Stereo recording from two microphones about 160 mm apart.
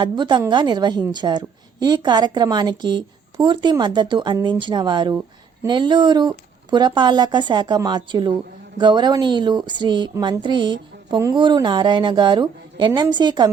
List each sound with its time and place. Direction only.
0.0 s a woman's voice: 30° right (ahead or behind)